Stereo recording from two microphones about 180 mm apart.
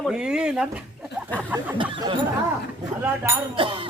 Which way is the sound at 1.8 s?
30° right (ahead or behind).